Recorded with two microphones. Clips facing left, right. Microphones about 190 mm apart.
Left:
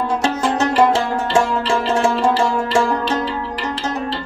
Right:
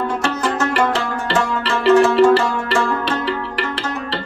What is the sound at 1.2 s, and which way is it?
Music, 65° right (ahead or behind).